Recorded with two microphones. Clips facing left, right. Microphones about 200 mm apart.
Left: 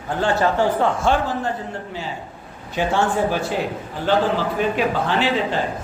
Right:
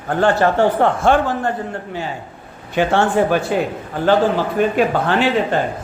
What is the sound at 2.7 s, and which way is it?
Speech, 65° right (ahead or behind).